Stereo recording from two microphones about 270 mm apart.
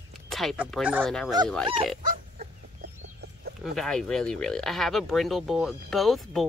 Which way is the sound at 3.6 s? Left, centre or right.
Centre.